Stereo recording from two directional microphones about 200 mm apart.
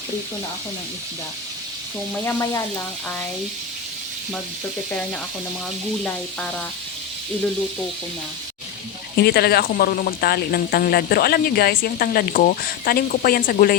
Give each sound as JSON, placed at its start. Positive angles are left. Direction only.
{"t": 2.2, "sound": "speech", "side_deg": 15}
{"t": 9.1, "sound": "speech", "side_deg": 55}